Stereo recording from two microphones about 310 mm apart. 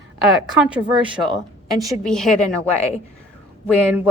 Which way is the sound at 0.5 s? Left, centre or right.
Centre.